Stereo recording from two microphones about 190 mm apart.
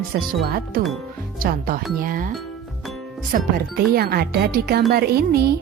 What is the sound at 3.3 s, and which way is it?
Speech, 55° right (ahead or behind).